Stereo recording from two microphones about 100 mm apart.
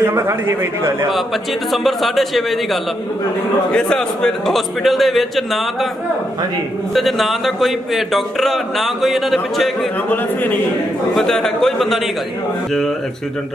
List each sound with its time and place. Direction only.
0.0 s a man's voice: 25° right (ahead or behind)
1.7 s speech: centre (ahead or behind)
6.9 s speech: centre (ahead or behind)
10.0 s a man's voice: 20° left (ahead or behind)
11.1 s speech: 5° left (ahead or behind)